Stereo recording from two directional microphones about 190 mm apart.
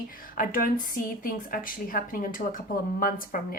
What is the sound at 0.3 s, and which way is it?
A woman's voice, 50° left (ahead or behind).